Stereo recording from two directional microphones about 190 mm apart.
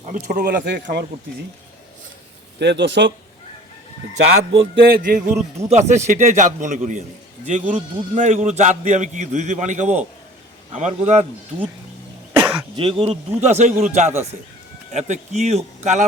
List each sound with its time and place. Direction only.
0.1 s a man's voice: 40° right (ahead or behind)
0.4 s speech: 65° right (ahead or behind)
2.6 s speech: 65° right (ahead or behind)
4.7 s music: 55° right (ahead or behind)
5.5 s a man's voice: 35° right (ahead or behind)
12.3 s cough: 5° right (ahead or behind)
12.7 s a man's voice: 30° right (ahead or behind)